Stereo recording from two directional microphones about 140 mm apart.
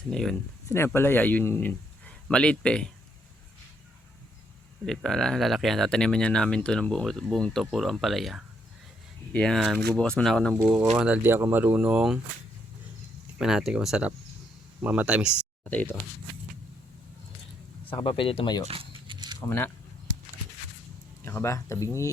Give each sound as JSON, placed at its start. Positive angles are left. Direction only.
{"t": 0.1, "sound": "speech", "side_deg": 0}
{"t": 0.7, "sound": "a man's voice", "side_deg": 15}
{"t": 4.9, "sound": "speech", "side_deg": 5}
{"t": 13.4, "sound": "speech", "side_deg": -5}
{"t": 15.7, "sound": "speech", "side_deg": 10}
{"t": 17.9, "sound": "speech", "side_deg": 35}
{"t": 18.7, "sound": "a sound", "side_deg": -35}
{"t": 19.4, "sound": "speech", "side_deg": 15}
{"t": 21.2, "sound": "speech", "side_deg": 20}